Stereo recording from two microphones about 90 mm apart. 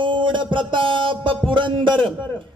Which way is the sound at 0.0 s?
60° right (ahead or behind).